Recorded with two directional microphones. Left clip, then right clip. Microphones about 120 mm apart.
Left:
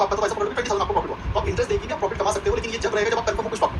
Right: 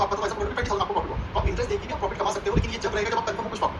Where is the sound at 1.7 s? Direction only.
30° right (ahead or behind).